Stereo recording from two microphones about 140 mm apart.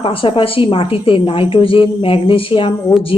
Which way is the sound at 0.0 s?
40° left (ahead or behind).